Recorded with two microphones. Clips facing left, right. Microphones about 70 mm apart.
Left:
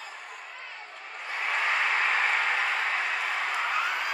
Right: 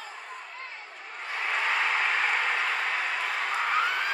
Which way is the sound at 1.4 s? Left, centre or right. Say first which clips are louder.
Even; centre.